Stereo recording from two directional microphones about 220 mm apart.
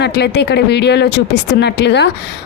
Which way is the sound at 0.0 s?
50° left (ahead or behind).